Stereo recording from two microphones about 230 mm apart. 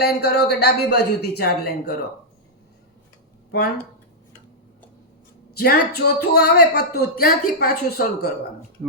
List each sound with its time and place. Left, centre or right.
0.0 s speech: left
5.5 s speech: left